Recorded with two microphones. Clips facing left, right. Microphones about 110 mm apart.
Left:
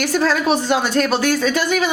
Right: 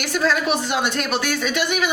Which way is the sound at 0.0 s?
35° left (ahead or behind).